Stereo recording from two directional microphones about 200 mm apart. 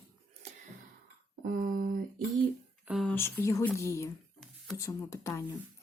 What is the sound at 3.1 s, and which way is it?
Speech, 15° left (ahead or behind).